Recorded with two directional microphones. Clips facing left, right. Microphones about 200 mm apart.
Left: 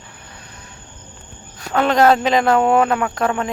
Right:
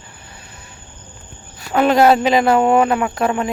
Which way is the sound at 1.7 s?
10° right (ahead or behind).